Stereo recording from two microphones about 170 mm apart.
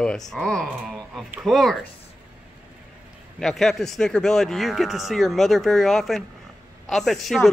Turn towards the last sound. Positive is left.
turn(degrees=0)  # may be behind; listen again after turning